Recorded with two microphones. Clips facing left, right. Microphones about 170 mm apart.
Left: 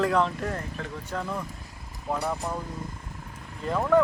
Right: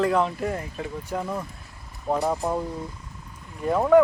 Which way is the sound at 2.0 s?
25° right (ahead or behind).